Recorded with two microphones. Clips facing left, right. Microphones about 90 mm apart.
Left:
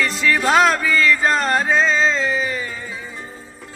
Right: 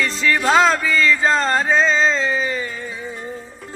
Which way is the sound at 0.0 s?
5° left (ahead or behind).